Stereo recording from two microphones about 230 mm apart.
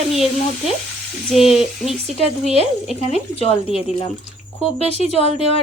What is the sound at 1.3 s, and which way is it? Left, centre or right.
Speech, centre.